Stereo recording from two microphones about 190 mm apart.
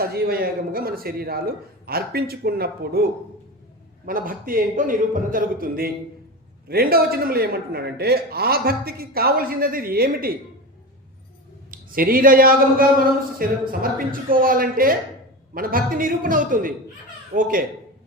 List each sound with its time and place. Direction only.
0.0 s a man's voice: 55° right (ahead or behind)
11.7 s a man's voice: 50° right (ahead or behind)